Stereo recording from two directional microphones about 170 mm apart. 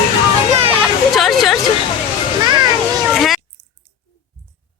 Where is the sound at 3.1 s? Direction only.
Centre (ahead or behind).